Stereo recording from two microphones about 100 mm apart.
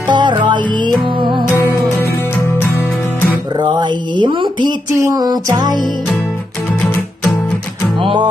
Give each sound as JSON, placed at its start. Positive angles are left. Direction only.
{"t": 0.1, "sound": "music", "side_deg": -50}
{"t": 3.5, "sound": "a sound", "side_deg": -50}
{"t": 4.9, "sound": "music", "side_deg": -35}
{"t": 8.0, "sound": "music", "side_deg": -55}